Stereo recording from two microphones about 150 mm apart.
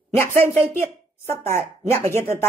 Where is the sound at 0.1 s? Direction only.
15° left (ahead or behind).